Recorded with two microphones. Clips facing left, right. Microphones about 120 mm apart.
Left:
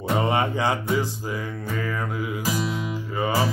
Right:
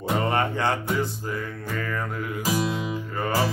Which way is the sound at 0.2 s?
10° left (ahead or behind).